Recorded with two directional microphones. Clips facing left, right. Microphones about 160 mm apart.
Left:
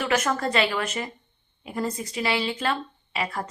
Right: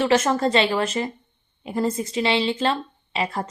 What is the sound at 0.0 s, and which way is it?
A woman's voice, 30° right (ahead or behind).